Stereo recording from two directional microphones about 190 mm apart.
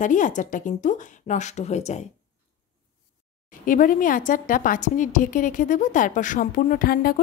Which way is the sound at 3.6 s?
45° left (ahead or behind).